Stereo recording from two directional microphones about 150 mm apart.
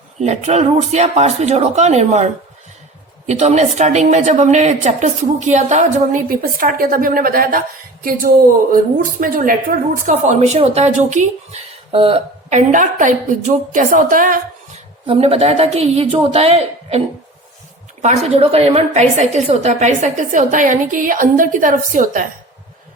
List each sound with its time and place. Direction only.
0.2 s a woman's voice: 50° right (ahead or behind)
11.9 s speech: 40° right (ahead or behind)
12.5 s a woman's voice: 55° right (ahead or behind)
15.0 s a woman's voice: 40° right (ahead or behind)
18.0 s a woman's voice: 50° right (ahead or behind)